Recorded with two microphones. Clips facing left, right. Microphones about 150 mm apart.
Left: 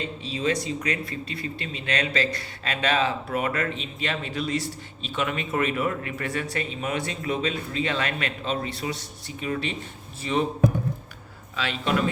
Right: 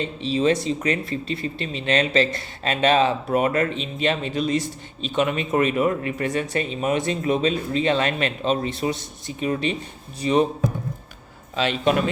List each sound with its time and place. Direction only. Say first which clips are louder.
0.3 s speech: right 6 dB; 25° right (ahead or behind)
11.5 s speech: right 6 dB; 20° right (ahead or behind)